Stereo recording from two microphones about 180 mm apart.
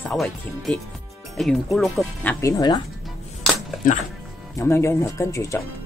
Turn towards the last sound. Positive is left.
turn(degrees=15)  # may be behind; listen again after turning